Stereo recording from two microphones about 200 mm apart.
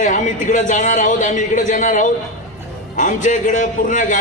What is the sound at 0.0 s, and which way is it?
A man's voice, 40° left (ahead or behind).